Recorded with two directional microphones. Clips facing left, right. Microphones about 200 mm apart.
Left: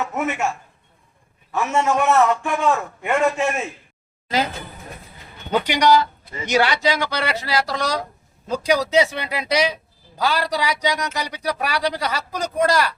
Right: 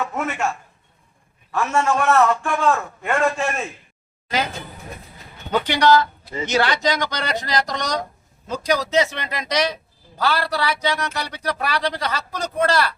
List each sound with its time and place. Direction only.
0.0 s a man's voice: 5° left (ahead or behind)
1.7 s a man's voice: 20° left (ahead or behind)
5.5 s a man's voice: 10° left (ahead or behind)